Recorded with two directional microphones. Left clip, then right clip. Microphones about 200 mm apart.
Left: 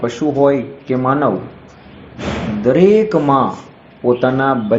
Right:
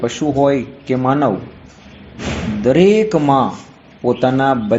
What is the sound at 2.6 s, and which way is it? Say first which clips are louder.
A man's voice: left 1 dB; 30° right (ahead or behind).